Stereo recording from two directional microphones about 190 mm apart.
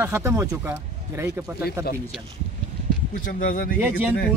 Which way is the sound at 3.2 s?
45° left (ahead or behind).